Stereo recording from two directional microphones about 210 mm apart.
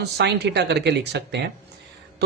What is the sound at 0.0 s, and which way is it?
Speech, 50° right (ahead or behind).